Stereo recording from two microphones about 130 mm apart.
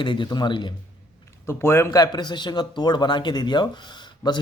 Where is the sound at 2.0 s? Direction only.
35° left (ahead or behind).